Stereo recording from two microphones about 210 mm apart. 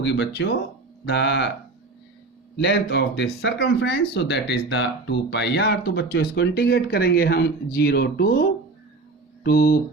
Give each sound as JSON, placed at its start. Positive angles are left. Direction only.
{"t": 0.0, "sound": "speech", "side_deg": 55}
{"t": 2.6, "sound": "speech", "side_deg": 55}
{"t": 9.4, "sound": "mantra", "side_deg": 45}